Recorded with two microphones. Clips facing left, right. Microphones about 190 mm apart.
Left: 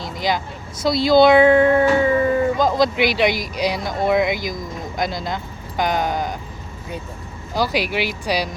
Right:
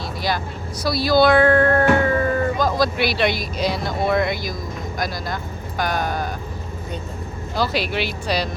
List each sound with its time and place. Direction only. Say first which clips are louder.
0.0 s speech: left 2 dB; 20° left (ahead or behind)
2.0 s a sound: left 3 dB; 10° left (ahead or behind)
3.0 s speech: left 2 dB; 15° left (ahead or behind)
7.5 s speech: left 1 dB; 15° left (ahead or behind)